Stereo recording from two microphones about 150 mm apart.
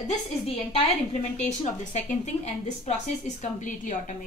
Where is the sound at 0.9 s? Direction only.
50° left (ahead or behind).